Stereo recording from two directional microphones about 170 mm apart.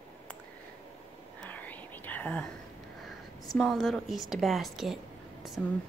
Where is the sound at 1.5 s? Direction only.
10° left (ahead or behind).